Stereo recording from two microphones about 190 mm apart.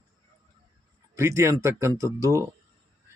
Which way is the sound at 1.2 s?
15° right (ahead or behind).